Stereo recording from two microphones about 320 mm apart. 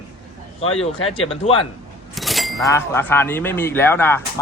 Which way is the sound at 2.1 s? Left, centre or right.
Centre.